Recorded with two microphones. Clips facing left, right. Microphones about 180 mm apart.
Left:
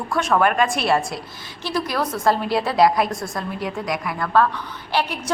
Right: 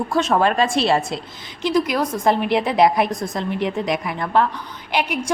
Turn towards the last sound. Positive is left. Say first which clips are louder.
# right 1 dB
turn(degrees=-15)  # may be behind; listen again after turning